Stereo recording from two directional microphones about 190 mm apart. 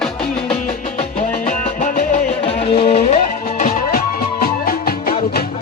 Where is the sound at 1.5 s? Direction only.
40° left (ahead or behind).